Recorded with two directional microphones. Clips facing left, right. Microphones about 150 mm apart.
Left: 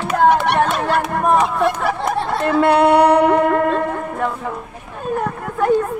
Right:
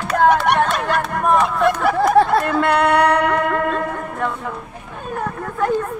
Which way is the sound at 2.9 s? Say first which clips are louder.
Left 4 dB; 30° left (ahead or behind).